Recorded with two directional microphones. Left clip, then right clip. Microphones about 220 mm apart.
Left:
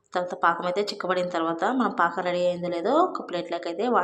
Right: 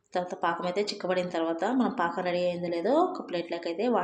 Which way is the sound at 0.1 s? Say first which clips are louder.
Left 5 dB; 5° right (ahead or behind).